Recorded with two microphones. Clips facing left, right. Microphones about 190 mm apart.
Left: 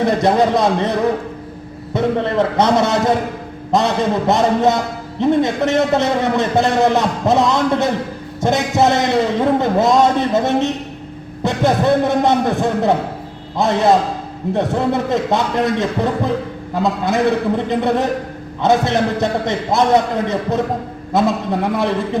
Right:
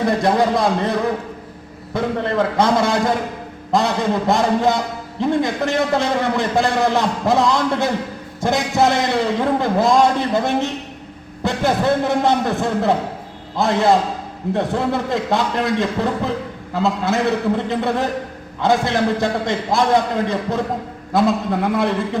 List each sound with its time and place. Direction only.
0.2 s a man's voice: 20° left (ahead or behind)
1.9 s a man's voice: 25° left (ahead or behind)
4.3 s a man's voice: 20° left (ahead or behind)